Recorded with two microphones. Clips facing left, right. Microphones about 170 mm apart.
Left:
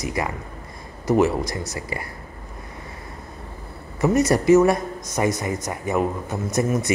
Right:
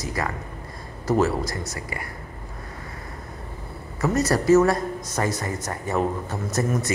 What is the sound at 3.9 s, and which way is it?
Speech, 20° left (ahead or behind).